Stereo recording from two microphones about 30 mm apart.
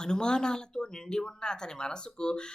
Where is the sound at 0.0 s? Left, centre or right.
Left.